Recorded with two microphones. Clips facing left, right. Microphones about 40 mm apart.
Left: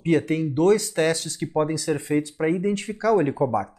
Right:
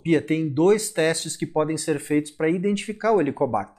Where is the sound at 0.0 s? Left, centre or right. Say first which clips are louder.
Even; centre.